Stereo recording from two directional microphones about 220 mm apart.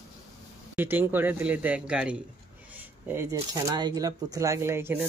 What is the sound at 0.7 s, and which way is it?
Speech, 10° right (ahead or behind).